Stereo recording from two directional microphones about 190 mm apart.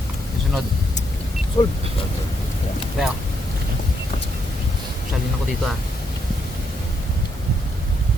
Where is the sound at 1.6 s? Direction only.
30° left (ahead or behind).